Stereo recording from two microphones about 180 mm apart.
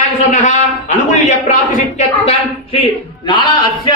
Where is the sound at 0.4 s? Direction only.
40° left (ahead or behind).